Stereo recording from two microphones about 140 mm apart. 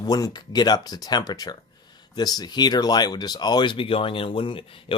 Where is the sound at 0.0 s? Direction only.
30° left (ahead or behind).